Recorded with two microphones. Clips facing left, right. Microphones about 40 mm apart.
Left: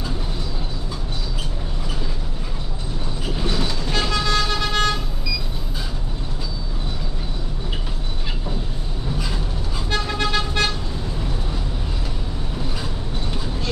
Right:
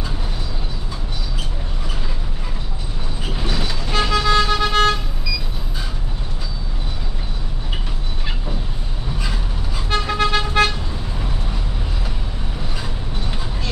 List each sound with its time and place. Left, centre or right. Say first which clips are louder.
3.4 s vehicle: even; centre
9.8 s vehicle: right 4 dB; centre